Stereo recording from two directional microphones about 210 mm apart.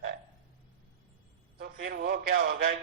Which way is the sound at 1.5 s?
45° right (ahead or behind).